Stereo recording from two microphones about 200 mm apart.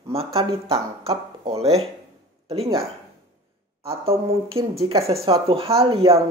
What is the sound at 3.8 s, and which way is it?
Speech, 30° right (ahead or behind).